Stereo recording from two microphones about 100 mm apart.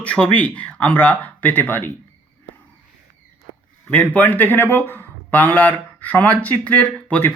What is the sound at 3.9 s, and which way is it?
Speech, 15° left (ahead or behind).